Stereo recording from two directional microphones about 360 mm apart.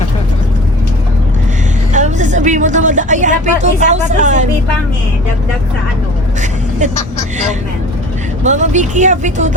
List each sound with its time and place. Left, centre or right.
1.9 s speech: centre
8.4 s speech: centre